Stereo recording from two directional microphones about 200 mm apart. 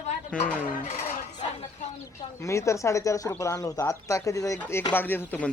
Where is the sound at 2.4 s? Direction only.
15° left (ahead or behind).